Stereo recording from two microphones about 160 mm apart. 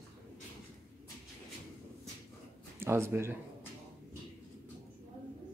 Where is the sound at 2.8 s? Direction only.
15° right (ahead or behind).